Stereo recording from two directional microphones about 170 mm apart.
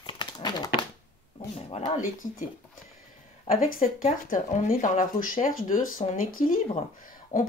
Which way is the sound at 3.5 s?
55° left (ahead or behind).